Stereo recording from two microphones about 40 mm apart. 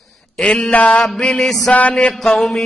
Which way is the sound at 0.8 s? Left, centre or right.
Left.